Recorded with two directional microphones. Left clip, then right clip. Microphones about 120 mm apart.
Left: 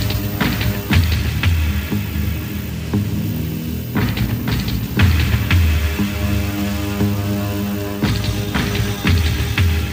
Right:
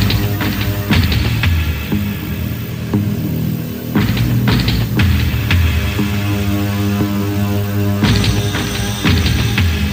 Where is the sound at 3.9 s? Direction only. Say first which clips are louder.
Right 4 dB; 35° left (ahead or behind).